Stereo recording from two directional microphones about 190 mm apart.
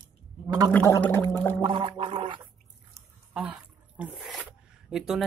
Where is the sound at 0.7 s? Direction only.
15° left (ahead or behind).